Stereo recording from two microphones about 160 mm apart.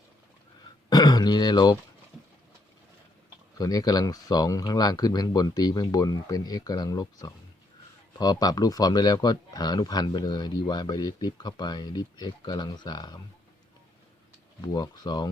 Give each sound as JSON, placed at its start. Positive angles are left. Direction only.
{"t": 0.9, "sound": "throat clearing", "side_deg": 25}
{"t": 3.6, "sound": "speech", "side_deg": 25}
{"t": 14.7, "sound": "speech", "side_deg": 25}